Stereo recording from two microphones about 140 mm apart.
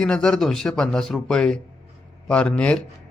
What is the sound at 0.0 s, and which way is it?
Speech, 5° left (ahead or behind).